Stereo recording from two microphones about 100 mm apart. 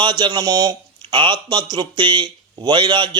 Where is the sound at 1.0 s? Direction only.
55° right (ahead or behind).